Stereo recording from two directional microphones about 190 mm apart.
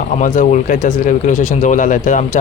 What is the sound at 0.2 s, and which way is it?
Speech, 40° left (ahead or behind).